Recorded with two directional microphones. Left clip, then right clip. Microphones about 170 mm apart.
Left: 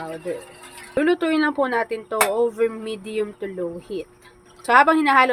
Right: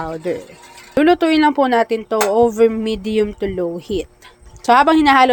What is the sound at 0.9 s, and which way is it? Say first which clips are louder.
A woman's voice: right 7 dB; 35° right (ahead or behind).